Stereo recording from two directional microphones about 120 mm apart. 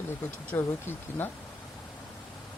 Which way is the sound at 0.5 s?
20° left (ahead or behind).